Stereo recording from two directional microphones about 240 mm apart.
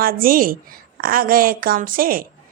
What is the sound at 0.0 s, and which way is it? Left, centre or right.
A woman's voice, right.